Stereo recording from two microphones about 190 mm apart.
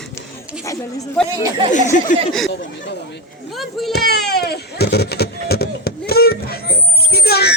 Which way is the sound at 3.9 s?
60° left (ahead or behind).